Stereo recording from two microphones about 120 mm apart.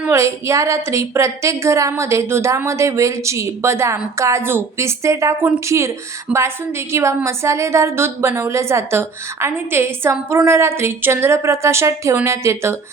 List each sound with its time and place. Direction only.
0.1 s a woman's voice: 25° right (ahead or behind)